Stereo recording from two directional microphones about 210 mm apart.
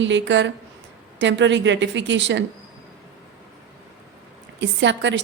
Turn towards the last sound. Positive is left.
turn(degrees=-60)  # may be behind; listen again after turning